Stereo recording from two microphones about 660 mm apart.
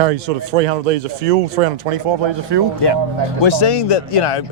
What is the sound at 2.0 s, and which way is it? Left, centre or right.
Speech, right.